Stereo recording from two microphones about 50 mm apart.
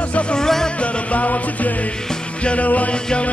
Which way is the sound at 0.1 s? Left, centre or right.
Left.